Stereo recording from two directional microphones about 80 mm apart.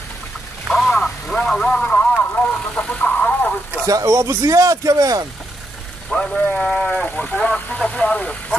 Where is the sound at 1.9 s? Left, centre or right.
Left.